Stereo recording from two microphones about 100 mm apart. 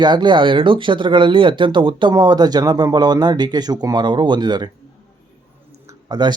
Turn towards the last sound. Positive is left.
turn(degrees=-45)  # may be behind; listen again after turning